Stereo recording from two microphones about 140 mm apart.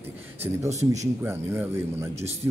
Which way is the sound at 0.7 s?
55° right (ahead or behind).